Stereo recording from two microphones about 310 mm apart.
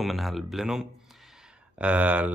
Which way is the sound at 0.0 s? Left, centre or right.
Centre.